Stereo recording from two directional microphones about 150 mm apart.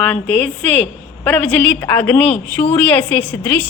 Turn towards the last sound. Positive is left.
turn(degrees=10)  # may be behind; listen again after turning